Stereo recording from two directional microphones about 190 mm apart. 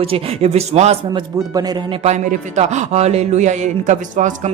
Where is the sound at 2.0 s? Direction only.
35° right (ahead or behind).